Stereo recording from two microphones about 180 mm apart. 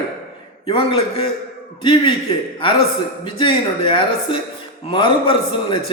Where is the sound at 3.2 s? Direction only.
30° left (ahead or behind).